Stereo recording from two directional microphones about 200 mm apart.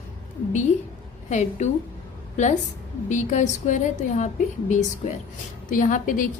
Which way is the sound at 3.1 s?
35° left (ahead or behind).